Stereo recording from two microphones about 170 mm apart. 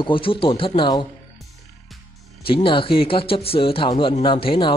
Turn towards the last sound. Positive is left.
turn(degrees=30)  # may be behind; listen again after turning